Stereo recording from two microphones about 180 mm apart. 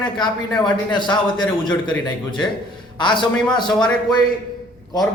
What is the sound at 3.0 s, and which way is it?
Speech, 25° left (ahead or behind).